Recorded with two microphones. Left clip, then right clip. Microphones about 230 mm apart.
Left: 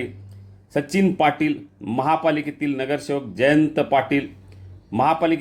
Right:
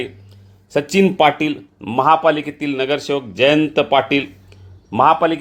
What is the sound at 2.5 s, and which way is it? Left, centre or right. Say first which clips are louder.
Speech: right 5 dB; centre.